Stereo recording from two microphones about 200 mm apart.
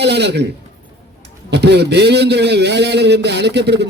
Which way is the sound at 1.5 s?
60° right (ahead or behind).